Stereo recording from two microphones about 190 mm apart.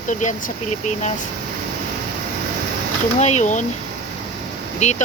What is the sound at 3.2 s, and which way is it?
Speech, 35° left (ahead or behind).